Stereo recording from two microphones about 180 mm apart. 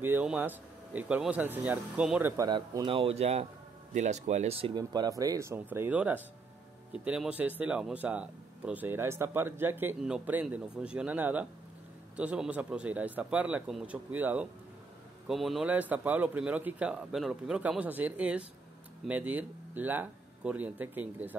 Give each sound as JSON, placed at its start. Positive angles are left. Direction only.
{"t": 0.0, "sound": "speech", "side_deg": -10}